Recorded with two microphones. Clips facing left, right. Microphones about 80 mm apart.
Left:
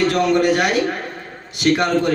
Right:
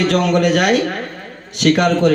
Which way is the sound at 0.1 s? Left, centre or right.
Right.